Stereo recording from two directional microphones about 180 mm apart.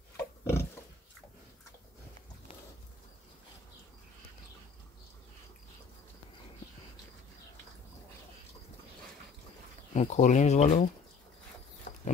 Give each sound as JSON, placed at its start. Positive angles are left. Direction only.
{"t": 0.2, "sound": "pig", "side_deg": 15}
{"t": 9.9, "sound": "speech", "side_deg": 40}
{"t": 11.9, "sound": "a sound", "side_deg": 40}